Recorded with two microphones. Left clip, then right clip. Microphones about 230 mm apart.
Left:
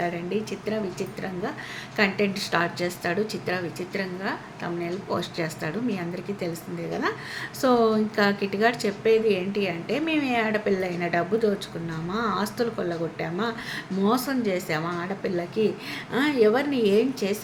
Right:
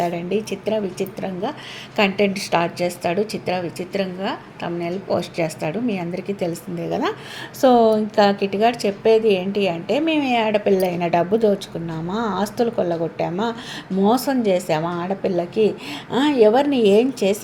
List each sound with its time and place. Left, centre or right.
0.0 s a woman's voice: centre
7.6 s a woman's voice: centre